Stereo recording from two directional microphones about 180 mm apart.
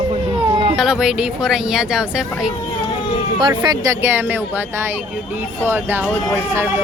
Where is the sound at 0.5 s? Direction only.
30° right (ahead or behind).